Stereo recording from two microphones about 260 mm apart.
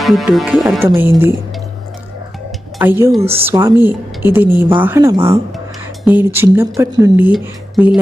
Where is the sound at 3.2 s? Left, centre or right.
Right.